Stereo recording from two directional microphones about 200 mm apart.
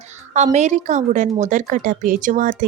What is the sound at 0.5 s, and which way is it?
A woman's voice, 35° right (ahead or behind).